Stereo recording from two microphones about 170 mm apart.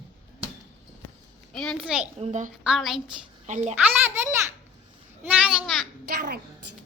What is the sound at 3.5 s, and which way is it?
Speech, 45° right (ahead or behind).